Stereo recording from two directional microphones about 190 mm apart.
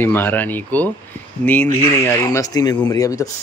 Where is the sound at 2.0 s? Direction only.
15° left (ahead or behind).